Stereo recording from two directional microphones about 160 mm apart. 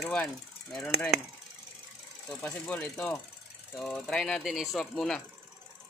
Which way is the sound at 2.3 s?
5° left (ahead or behind).